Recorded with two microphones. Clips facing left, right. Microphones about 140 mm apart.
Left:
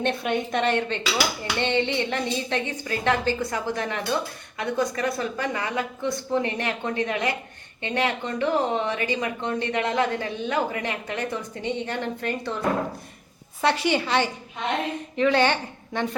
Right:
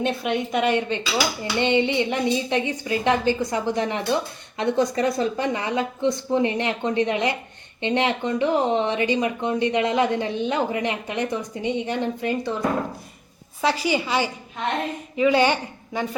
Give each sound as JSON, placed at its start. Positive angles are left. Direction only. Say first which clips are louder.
{"t": 0.0, "sound": "a woman's voice", "louder": "right 1 dB", "side_deg": 0}
{"t": 13.6, "sound": "a woman's voice", "louder": "even", "side_deg": 0}